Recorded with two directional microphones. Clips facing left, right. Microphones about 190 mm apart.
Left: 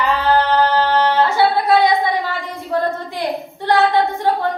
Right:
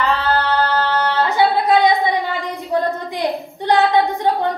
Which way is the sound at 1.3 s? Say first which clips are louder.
Even; 15° right (ahead or behind).